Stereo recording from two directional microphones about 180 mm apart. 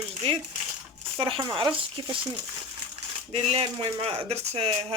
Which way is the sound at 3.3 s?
35° right (ahead or behind).